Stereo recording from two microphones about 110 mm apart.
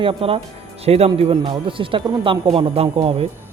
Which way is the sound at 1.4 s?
50° right (ahead or behind).